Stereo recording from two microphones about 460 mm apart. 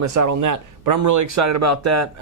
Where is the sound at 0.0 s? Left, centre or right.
Right.